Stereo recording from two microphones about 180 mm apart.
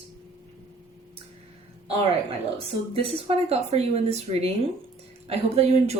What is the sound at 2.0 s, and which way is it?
Speech, 30° right (ahead or behind).